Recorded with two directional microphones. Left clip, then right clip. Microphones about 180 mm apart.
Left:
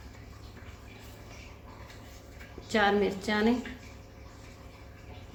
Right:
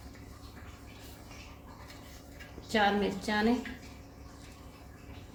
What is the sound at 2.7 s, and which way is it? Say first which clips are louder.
Speech: left 2 dB; 15° left (ahead or behind).